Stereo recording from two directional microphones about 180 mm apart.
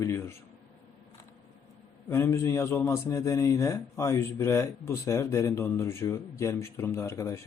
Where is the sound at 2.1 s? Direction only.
15° left (ahead or behind).